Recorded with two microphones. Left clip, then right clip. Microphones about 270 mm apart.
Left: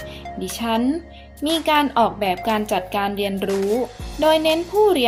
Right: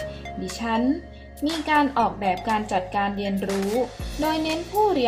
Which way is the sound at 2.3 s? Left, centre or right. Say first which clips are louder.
Left 3 dB; centre.